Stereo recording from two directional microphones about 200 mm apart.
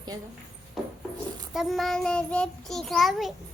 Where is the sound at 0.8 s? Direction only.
Centre (ahead or behind).